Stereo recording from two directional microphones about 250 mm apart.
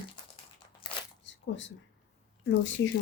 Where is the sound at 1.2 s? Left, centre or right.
Left.